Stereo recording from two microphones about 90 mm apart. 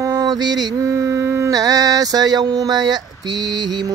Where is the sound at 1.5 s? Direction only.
45° right (ahead or behind).